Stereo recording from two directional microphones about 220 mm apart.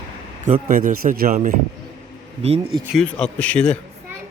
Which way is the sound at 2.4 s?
25° right (ahead or behind).